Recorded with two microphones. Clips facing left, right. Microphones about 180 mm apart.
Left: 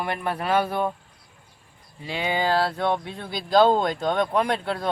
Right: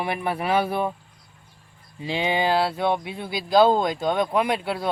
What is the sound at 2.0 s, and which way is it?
Speech, 20° right (ahead or behind).